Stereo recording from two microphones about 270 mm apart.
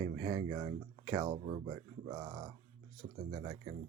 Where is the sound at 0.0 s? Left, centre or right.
Centre.